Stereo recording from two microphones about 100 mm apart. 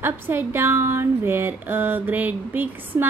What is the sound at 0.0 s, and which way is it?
Speech, 20° right (ahead or behind).